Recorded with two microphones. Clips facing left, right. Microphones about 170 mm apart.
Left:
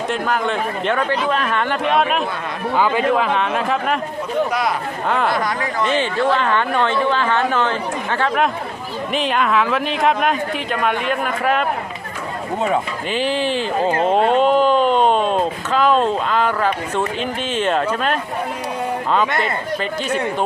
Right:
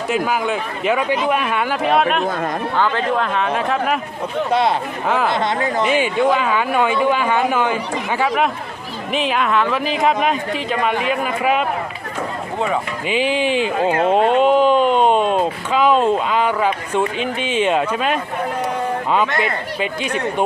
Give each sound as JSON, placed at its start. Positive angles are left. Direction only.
{"t": 0.1, "sound": "speech", "side_deg": -5}
{"t": 2.7, "sound": "speech", "side_deg": 10}
{"t": 5.0, "sound": "speech", "side_deg": -5}
{"t": 5.3, "sound": "speech", "side_deg": -25}
{"t": 5.8, "sound": "speech", "side_deg": -10}
{"t": 13.1, "sound": "speech", "side_deg": -5}